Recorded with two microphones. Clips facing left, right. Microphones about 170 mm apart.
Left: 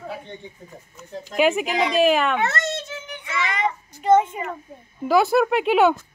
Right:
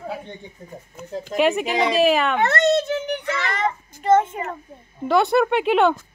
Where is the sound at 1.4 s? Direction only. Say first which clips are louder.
Even; centre (ahead or behind).